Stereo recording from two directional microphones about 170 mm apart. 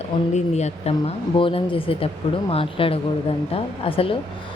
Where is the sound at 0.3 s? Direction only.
40° left (ahead or behind).